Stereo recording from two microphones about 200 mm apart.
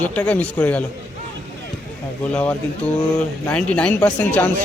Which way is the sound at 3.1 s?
5° left (ahead or behind).